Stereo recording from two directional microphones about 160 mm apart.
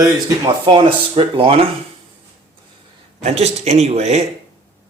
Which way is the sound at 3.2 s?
40° right (ahead or behind).